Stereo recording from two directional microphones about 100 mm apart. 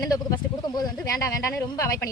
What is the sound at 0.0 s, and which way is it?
A woman's voice, 35° left (ahead or behind).